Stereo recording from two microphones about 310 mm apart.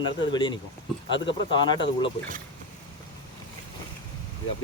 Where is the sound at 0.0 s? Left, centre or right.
Centre.